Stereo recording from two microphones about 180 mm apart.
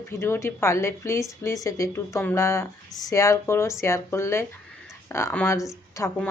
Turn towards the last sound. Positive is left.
turn(degrees=15)  # may be behind; listen again after turning